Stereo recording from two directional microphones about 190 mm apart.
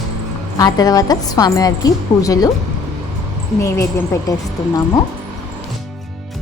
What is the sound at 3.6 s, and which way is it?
Speech, 15° left (ahead or behind).